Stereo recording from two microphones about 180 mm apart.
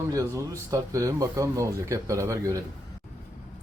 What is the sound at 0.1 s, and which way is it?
Speech, 20° right (ahead or behind).